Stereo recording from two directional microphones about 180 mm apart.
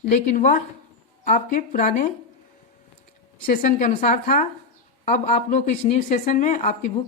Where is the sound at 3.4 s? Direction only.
45° left (ahead or behind).